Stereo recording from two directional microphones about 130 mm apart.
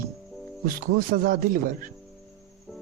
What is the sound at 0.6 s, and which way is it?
Speech, 90° right.